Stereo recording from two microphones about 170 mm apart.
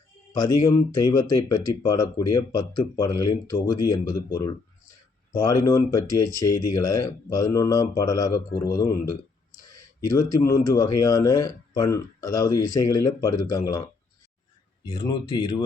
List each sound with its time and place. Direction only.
0.3 s speech: 25° left (ahead or behind)
14.8 s speech: 25° left (ahead or behind)